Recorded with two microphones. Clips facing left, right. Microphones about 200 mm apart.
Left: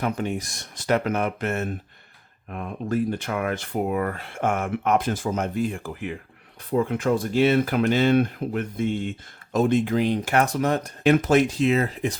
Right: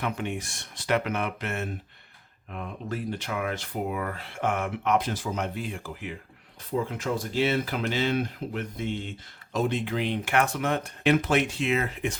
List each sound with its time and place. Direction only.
0.0 s speech: 40° left (ahead or behind)